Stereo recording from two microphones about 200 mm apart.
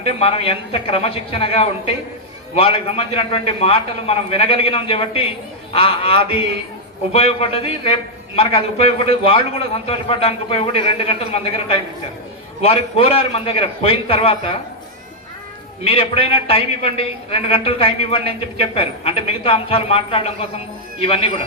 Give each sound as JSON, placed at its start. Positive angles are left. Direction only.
{"t": 0.2, "sound": "a man's voice", "side_deg": 30}
{"t": 12.6, "sound": "a man's voice", "side_deg": 30}
{"t": 15.8, "sound": "a man's voice", "side_deg": 25}